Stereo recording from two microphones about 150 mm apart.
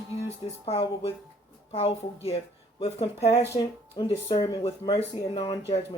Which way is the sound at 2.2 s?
40° left (ahead or behind).